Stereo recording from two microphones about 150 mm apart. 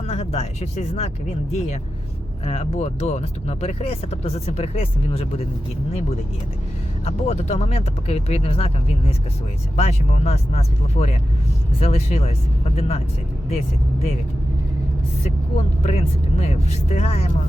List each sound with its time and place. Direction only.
0.1 s speech: 45° left (ahead or behind)
2.4 s speech: 45° left (ahead or behind)
7.0 s speech: 45° left (ahead or behind)
15.2 s speech: 50° left (ahead or behind)